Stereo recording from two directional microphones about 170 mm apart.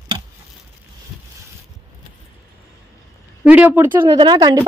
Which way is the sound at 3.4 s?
10° right (ahead or behind).